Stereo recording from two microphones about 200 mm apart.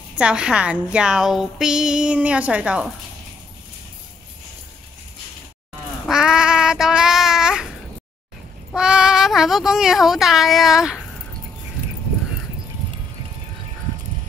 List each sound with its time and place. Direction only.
0.2 s a woman's voice: 5° right (ahead or behind)
6.0 s child singing: 5° right (ahead or behind)
8.7 s a woman's voice: 5° right (ahead or behind)